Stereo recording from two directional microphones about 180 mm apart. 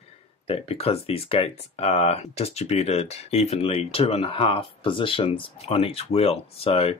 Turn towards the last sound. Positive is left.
turn(degrees=35)  # may be behind; listen again after turning